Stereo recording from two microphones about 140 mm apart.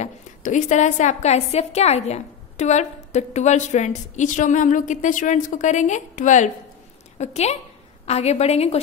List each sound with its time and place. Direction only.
0.0 s a woman's voice: 60° left (ahead or behind)
7.2 s a woman's voice: 50° left (ahead or behind)